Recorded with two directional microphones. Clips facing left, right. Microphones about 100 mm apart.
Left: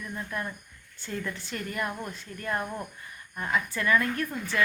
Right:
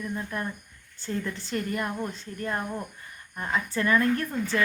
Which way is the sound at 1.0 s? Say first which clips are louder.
Right 3 dB; 30° right (ahead or behind).